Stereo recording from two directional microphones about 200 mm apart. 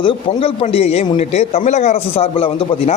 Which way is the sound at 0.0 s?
25° left (ahead or behind).